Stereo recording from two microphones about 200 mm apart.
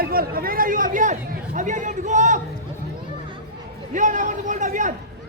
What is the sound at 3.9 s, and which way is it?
Speech, 40° right (ahead or behind).